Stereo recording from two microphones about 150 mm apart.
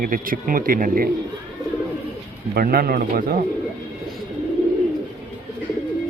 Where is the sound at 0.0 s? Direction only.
70° right (ahead or behind).